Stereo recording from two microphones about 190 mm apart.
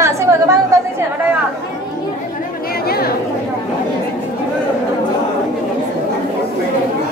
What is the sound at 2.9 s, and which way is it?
Chatter, 55° left (ahead or behind).